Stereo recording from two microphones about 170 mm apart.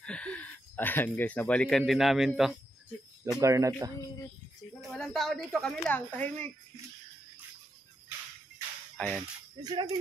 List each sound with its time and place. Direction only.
0.0 s speech: 5° left (ahead or behind)
3.3 s speech: 20° right (ahead or behind)
4.8 s speech: centre (ahead or behind)
8.9 s speech: 5° left (ahead or behind)
9.6 s speech: 25° right (ahead or behind)